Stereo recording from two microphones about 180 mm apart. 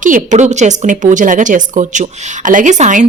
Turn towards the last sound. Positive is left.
turn(degrees=-45)  # may be behind; listen again after turning